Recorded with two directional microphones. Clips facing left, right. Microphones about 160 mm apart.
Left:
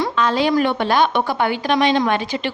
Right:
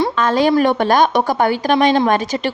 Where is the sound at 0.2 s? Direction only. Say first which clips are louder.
Right 3 dB; 45° right (ahead or behind).